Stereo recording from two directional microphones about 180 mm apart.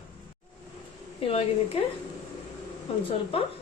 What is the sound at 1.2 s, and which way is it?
Speech, 35° left (ahead or behind).